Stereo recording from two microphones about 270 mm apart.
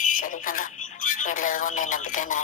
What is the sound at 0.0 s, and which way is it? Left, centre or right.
Speech, left.